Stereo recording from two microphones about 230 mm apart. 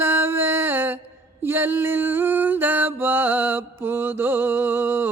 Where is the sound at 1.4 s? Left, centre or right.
Centre.